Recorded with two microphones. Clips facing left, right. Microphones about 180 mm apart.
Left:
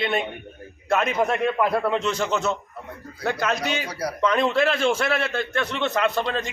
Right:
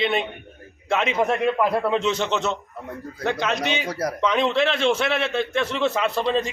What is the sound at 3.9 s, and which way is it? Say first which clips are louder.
Speech: right 3 dB; 45° right (ahead or behind).